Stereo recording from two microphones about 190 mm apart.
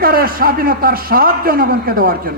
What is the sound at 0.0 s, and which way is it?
A man's voice, 50° right (ahead or behind).